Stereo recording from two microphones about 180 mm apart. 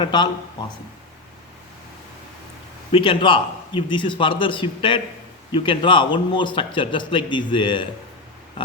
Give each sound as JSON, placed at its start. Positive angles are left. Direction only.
{"t": 0.0, "sound": "a man's voice", "side_deg": 25}
{"t": 2.9, "sound": "a man's voice", "side_deg": 30}